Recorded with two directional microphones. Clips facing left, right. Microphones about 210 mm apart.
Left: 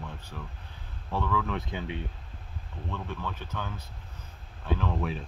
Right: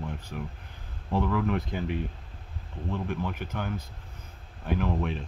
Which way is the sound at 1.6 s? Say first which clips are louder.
Right 4 dB; 5° right (ahead or behind).